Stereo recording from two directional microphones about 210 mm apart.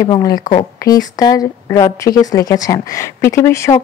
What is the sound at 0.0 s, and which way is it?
Speech, 20° left (ahead or behind).